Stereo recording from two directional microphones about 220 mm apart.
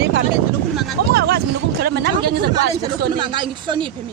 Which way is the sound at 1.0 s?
45° right (ahead or behind).